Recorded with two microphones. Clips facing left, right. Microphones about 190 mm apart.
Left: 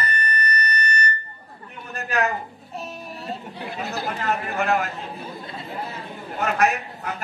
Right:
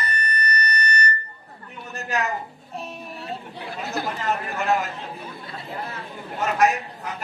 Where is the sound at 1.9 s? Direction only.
55° left (ahead or behind).